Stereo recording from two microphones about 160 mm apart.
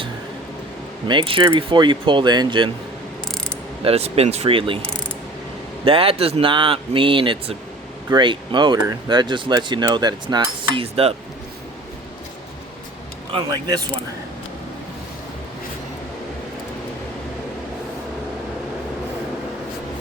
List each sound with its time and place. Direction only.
1.0 s speech: 30° right (ahead or behind)
3.8 s speech: 40° right (ahead or behind)
5.8 s speech: 35° right (ahead or behind)
13.3 s speech: 35° right (ahead or behind)